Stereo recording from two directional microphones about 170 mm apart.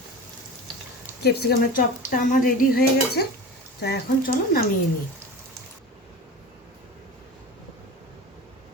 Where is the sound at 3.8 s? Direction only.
70° left (ahead or behind).